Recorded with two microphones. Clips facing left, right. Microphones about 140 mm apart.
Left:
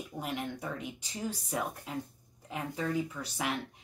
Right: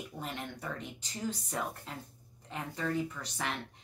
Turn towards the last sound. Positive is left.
turn(degrees=10)  # may be behind; listen again after turning